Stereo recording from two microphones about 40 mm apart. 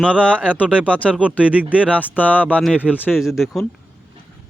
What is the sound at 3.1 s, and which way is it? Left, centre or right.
Speech, centre.